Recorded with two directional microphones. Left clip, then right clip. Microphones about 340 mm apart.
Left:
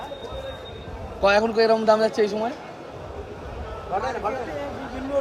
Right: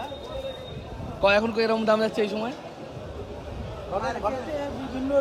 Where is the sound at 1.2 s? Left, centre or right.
Centre.